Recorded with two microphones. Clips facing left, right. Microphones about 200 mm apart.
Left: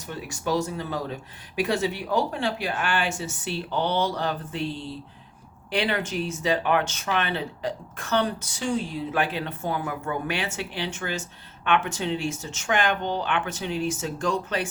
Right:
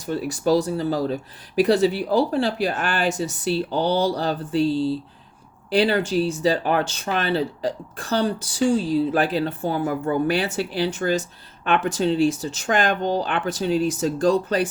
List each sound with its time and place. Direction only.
0.0 s speech: 35° right (ahead or behind)